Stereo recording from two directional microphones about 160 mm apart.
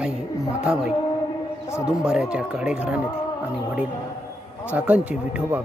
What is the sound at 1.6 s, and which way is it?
Speech, 15° left (ahead or behind).